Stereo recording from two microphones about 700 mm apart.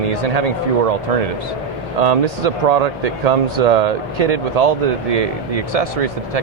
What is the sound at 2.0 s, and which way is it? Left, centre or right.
Speech, right.